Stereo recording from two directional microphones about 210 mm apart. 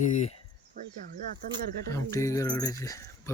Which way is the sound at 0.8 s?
45° right (ahead or behind).